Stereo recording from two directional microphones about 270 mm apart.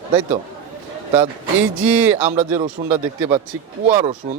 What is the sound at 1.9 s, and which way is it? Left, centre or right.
Speech, centre.